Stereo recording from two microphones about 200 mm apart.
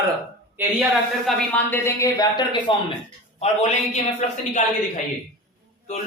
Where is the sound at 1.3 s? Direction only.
5° left (ahead or behind).